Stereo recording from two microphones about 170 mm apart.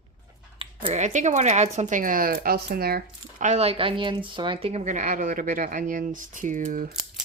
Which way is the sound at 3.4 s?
40° right (ahead or behind).